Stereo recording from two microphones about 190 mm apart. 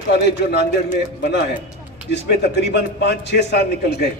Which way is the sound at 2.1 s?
60° left (ahead or behind).